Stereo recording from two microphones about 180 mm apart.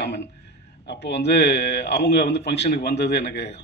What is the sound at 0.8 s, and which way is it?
Speech, 70° left (ahead or behind).